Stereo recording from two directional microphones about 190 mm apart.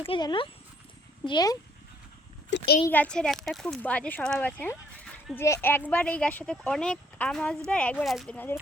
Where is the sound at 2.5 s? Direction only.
70° left (ahead or behind).